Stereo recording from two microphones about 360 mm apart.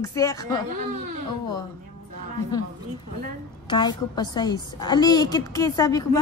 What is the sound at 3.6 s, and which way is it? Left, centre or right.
A woman's voice, centre.